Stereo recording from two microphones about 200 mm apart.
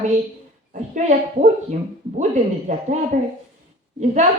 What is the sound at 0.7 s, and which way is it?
Speech, 35° right (ahead or behind).